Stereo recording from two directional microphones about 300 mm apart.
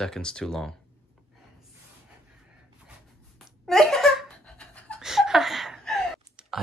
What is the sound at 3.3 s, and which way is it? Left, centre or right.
Laughter, centre.